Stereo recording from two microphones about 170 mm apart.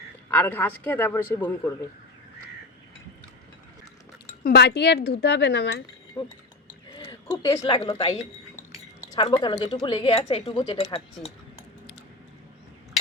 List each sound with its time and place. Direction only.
0.3 s a man's voice: 10° left (ahead or behind)
4.4 s speech: 80° left
6.9 s a sound: 30° left (ahead or behind)
7.4 s a woman's voice: 20° left (ahead or behind)
7.8 s a woman's voice: 30° left (ahead or behind)